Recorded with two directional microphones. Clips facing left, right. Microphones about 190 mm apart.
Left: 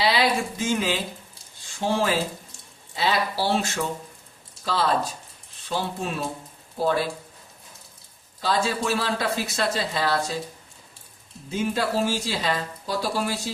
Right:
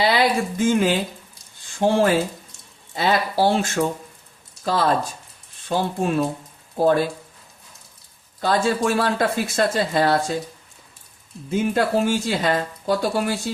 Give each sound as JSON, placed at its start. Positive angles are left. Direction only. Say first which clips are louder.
{"t": 0.0, "sound": "a sound", "louder": "right 3 dB", "side_deg": -50}
{"t": 1.8, "sound": "speech", "louder": "right 6 dB", "side_deg": -55}
{"t": 8.4, "sound": "speech", "louder": "right 5 dB", "side_deg": -50}
{"t": 11.5, "sound": "speech", "louder": "right 5 dB", "side_deg": -55}